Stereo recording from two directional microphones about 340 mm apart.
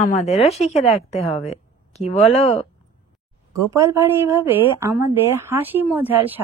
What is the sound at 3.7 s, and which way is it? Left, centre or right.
A woman's voice, centre.